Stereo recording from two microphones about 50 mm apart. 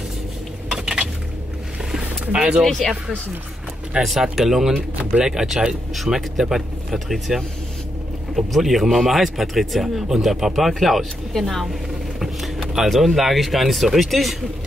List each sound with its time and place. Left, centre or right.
0.7 s dishes: centre
1.9 s a sound: centre
2.7 s speech: centre
4.0 s speech: centre